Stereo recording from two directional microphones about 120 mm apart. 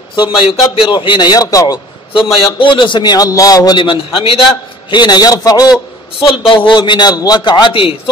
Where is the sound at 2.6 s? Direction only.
40° left (ahead or behind).